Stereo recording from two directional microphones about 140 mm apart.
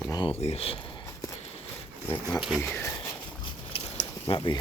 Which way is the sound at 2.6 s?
20° left (ahead or behind).